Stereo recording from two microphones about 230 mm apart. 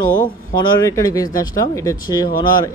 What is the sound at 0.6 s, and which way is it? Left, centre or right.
Speech, centre.